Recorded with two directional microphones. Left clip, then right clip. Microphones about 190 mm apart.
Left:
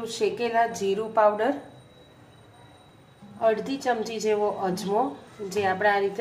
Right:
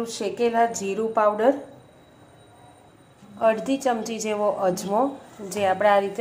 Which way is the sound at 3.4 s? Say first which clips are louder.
Right 3 dB; 25° right (ahead or behind).